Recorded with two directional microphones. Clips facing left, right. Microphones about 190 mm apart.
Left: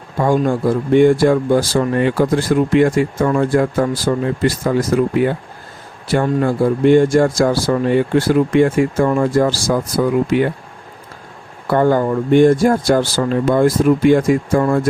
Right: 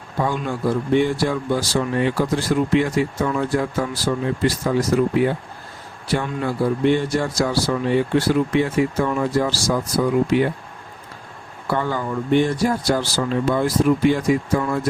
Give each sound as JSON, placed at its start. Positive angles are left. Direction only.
{"t": 0.2, "sound": "speech", "side_deg": 50}
{"t": 11.7, "sound": "speech", "side_deg": 50}